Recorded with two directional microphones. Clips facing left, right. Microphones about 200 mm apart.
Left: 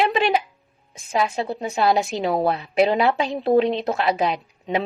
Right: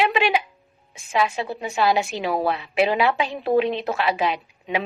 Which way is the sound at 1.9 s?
35° left (ahead or behind).